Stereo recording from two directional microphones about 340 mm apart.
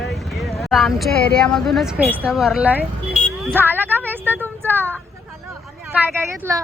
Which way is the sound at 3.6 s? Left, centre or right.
Centre.